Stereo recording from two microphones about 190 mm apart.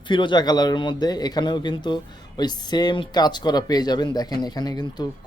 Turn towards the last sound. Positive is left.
turn(degrees=20)  # may be behind; listen again after turning